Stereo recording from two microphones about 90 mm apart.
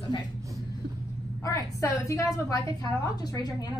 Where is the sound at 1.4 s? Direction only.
35° left (ahead or behind).